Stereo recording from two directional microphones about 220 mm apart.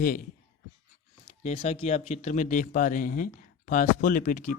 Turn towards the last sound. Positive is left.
turn(degrees=40)  # may be behind; listen again after turning